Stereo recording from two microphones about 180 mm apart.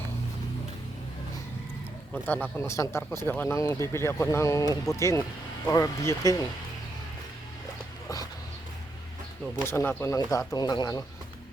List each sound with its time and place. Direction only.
2.2 s speech: 10° left (ahead or behind)
9.6 s speech: 15° left (ahead or behind)